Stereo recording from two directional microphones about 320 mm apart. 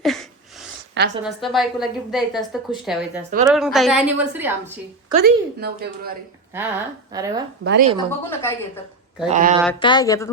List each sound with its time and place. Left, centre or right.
0.0 s a sound: centre
1.2 s a woman's voice: centre
4.6 s speech: right
6.5 s a woman's voice: centre
7.6 s a woman's voice: right
7.9 s a woman's voice: centre
9.2 s speech: right
9.8 s a woman's voice: centre